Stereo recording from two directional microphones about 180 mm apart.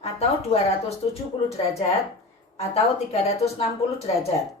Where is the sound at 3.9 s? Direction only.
35° left (ahead or behind).